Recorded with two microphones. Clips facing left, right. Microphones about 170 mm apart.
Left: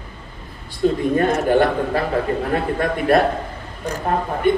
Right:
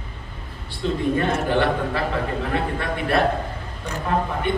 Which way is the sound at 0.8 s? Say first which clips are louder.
Left 5 dB; 50° left (ahead or behind).